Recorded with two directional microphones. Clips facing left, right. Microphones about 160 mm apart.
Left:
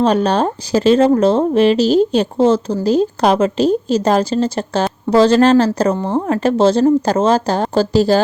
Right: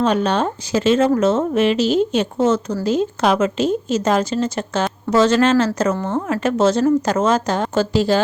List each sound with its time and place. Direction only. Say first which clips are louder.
0.0 s speech: left 3 dB; 35° left (ahead or behind)